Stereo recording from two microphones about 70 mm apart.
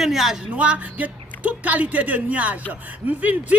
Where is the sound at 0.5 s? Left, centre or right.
Centre.